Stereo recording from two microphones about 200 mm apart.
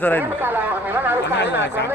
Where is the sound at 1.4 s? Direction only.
60° left (ahead or behind).